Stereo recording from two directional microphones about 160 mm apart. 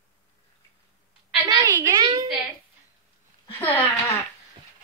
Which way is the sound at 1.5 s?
25° right (ahead or behind).